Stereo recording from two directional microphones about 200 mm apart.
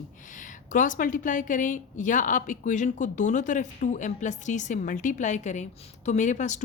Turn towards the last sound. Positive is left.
turn(degrees=35)  # may be behind; listen again after turning